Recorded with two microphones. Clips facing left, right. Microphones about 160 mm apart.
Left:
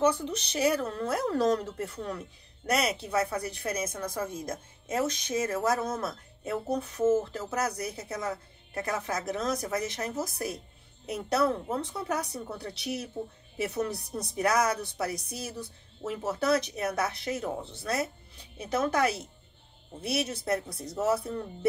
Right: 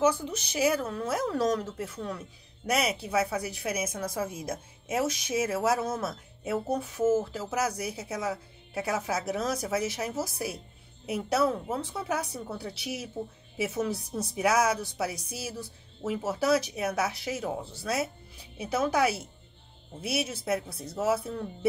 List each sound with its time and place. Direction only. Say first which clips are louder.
0.0 s a woman's voice: even; 5° right (ahead or behind)